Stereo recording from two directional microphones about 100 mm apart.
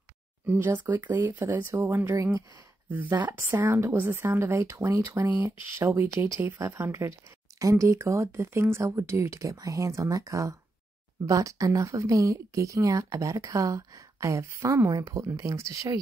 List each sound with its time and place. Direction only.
0.5 s a woman's voice: 20° right (ahead or behind)